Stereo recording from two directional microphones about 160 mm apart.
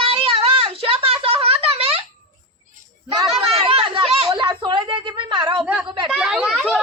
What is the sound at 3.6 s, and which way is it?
Chatter, 35° right (ahead or behind).